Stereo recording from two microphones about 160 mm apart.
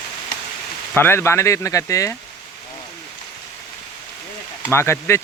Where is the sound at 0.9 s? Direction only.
15° left (ahead or behind).